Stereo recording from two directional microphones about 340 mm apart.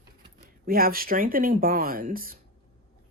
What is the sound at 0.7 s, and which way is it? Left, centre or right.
Speech, right.